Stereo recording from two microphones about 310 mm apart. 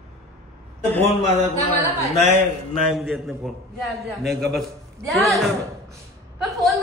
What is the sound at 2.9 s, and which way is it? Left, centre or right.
Chant, centre.